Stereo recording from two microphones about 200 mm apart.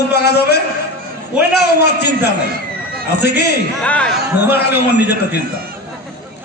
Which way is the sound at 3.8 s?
5° left (ahead or behind).